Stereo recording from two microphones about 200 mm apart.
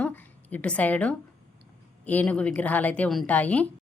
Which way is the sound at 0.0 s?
10° left (ahead or behind).